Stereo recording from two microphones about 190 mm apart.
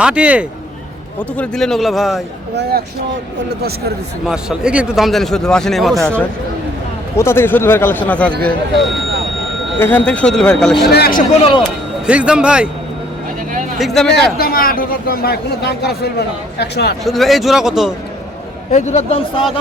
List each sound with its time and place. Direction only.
0.0 s a man's voice: 5° right (ahead or behind)
2.6 s speech: 55° right (ahead or behind)
4.3 s speech: 5° right (ahead or behind)
10.9 s a man's voice: 55° left (ahead or behind)
12.0 s speech: 5° right (ahead or behind)
13.7 s speech: centre (ahead or behind)
14.3 s speech: 50° left (ahead or behind)
17.0 s speech: centre (ahead or behind)
18.7 s speech: 35° left (ahead or behind)